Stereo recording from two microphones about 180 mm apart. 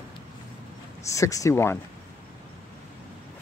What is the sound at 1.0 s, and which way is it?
Speech, 15° left (ahead or behind).